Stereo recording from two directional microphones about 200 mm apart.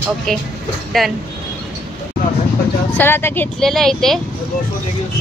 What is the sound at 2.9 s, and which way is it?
Speech, 10° left (ahead or behind).